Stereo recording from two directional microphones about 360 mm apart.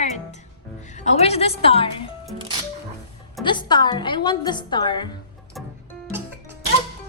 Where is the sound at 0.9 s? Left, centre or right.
Centre.